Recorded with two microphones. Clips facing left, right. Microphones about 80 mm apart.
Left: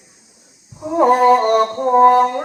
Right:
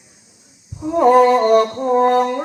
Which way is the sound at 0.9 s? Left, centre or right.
Centre.